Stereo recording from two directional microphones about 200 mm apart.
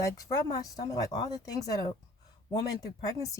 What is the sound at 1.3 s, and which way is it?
A woman's voice, 20° left (ahead or behind).